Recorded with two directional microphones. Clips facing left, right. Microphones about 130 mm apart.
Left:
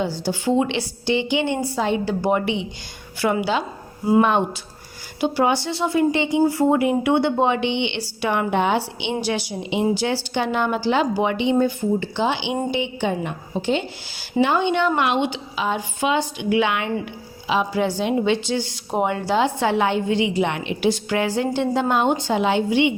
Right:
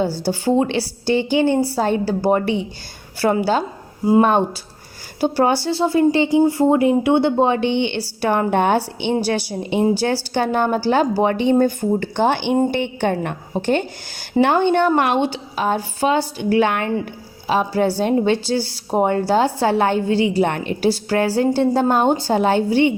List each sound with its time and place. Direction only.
0.3 s a woman's voice: 35° right (ahead or behind)